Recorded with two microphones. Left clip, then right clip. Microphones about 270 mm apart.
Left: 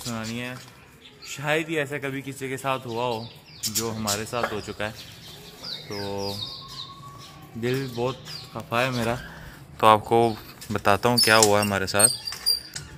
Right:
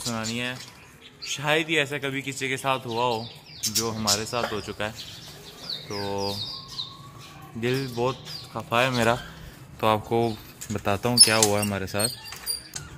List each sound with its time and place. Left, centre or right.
0.0 s a man's voice: centre
5.6 s bird: centre
7.6 s a man's voice: centre
9.8 s speech: left